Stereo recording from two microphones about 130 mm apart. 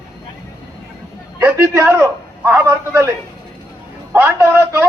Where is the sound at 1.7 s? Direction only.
20° right (ahead or behind).